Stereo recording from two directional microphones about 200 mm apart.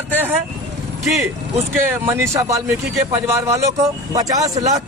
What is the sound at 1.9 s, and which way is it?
Speech, 15° right (ahead or behind).